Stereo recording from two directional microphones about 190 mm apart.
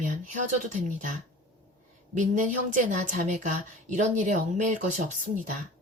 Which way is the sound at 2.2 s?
40° right (ahead or behind).